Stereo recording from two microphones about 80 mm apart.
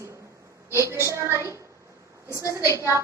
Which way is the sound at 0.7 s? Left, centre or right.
Right.